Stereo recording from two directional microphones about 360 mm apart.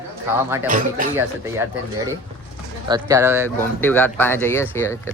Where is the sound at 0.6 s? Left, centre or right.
Right.